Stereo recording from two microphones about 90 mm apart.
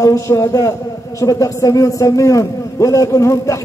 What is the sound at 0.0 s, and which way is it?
A man's voice, 30° left (ahead or behind).